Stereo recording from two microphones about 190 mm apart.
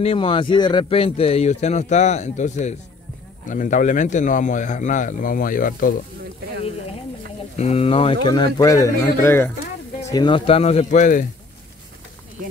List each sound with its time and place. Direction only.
0.0 s speech: 30° left (ahead or behind); by 5.9 s 45° left (ahead or behind)
7.5 s speech: 35° left (ahead or behind)